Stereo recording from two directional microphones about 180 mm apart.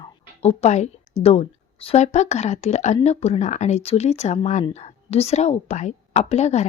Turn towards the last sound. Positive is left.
turn(degrees=40)  # may be behind; listen again after turning